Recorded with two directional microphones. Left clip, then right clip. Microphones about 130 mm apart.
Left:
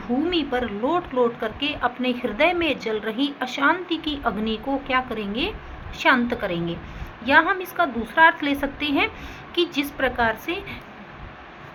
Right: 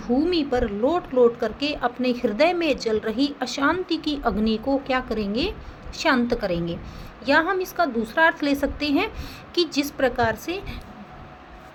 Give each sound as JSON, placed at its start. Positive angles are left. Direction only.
{"t": 0.3, "sound": "speech", "side_deg": -65}
{"t": 6.0, "sound": "a woman's voice", "side_deg": -60}